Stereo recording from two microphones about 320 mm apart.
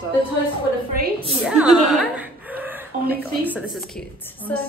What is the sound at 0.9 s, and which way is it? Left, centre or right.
Speech, right.